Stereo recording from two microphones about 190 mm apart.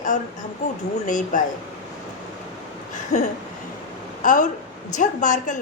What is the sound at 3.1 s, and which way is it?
A woman's voice, 35° left (ahead or behind).